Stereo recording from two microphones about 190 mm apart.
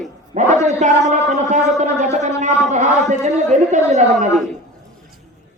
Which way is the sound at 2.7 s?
40° right (ahead or behind).